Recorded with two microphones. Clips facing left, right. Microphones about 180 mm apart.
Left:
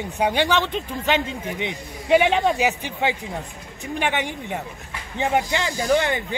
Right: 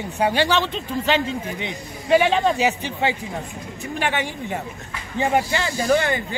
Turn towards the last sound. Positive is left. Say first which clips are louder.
# right 1 dB
turn(degrees=15)  # may be behind; listen again after turning